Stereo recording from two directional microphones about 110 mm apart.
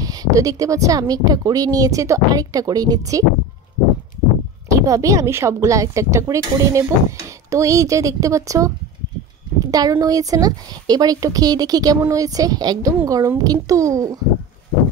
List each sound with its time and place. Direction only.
0.0 s speech: 35° right (ahead or behind)
4.6 s a woman's voice: 30° right (ahead or behind)